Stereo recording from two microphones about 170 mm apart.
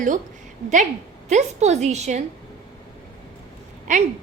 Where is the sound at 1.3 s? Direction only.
40° right (ahead or behind).